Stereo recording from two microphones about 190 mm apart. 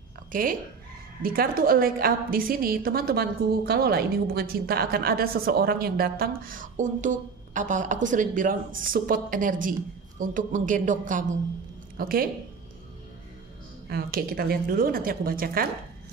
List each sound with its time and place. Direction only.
0.3 s a woman's voice: 45° right (ahead or behind)
13.8 s a woman's voice: 55° right (ahead or behind)